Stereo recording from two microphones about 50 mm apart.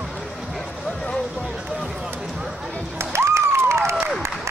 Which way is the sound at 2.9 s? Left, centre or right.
Right.